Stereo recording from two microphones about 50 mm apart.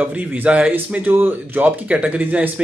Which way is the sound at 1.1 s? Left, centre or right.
Right.